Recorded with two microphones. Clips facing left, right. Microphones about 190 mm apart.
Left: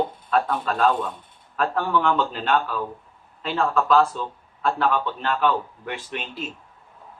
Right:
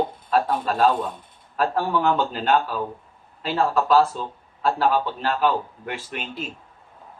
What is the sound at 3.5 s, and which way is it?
A man's voice, 30° right (ahead or behind).